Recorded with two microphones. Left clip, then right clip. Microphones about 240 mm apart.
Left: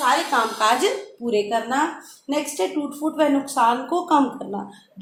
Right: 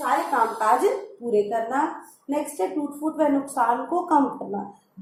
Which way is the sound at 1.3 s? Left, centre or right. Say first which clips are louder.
Left 1 dB; left.